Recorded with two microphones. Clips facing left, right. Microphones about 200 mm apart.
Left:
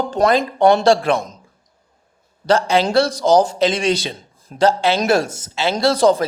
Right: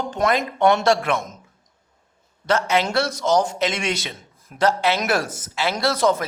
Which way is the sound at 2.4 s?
30° left (ahead or behind).